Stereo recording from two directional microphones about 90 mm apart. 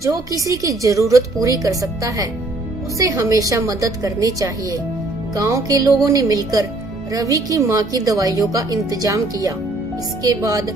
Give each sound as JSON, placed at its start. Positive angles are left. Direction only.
{"t": 0.0, "sound": "a woman's voice", "side_deg": -40}